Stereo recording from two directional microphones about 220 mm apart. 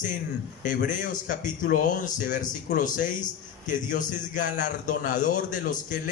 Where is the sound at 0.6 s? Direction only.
35° left (ahead or behind).